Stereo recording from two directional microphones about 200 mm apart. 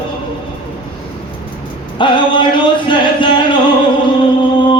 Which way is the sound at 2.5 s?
25° left (ahead or behind).